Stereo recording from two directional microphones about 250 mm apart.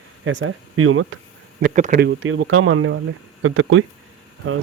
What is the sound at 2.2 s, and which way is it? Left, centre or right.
A man's voice, right.